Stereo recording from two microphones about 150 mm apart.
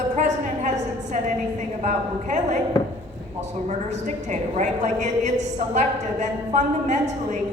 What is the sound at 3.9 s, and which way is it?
A woman's voice, 50° right (ahead or behind).